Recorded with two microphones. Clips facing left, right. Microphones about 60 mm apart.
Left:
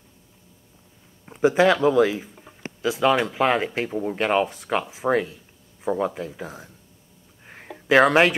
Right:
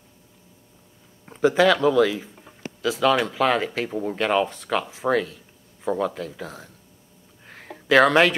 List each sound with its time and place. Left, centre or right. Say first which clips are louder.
1.4 s speech: even; centre
2.2 s a sound: even; centre
2.6 s speech: even; left
3.9 s speech: left 1 dB; centre
4.2 s speech: even; centre
7.4 s a sound: left 1 dB; centre
7.9 s speech: even; centre